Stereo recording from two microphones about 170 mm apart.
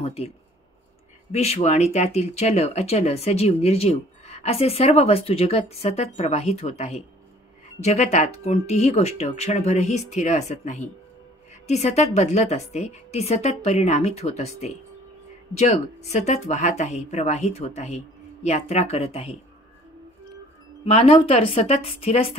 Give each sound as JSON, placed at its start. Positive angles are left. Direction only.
{"t": 0.0, "sound": "speech", "side_deg": 35}
{"t": 1.3, "sound": "speech", "side_deg": 40}
{"t": 20.8, "sound": "speech", "side_deg": 35}